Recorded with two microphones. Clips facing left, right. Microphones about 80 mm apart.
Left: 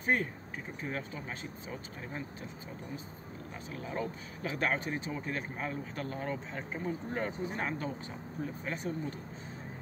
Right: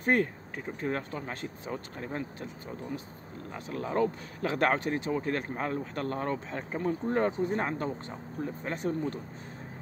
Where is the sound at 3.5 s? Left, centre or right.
Right.